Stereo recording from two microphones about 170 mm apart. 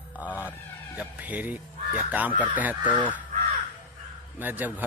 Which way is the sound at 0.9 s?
10° right (ahead or behind).